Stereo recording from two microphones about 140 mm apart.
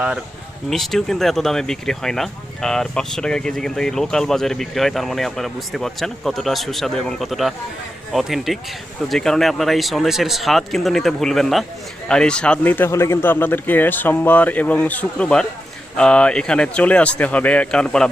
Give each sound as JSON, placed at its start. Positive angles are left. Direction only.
{"t": 0.7, "sound": "a man's voice", "side_deg": 0}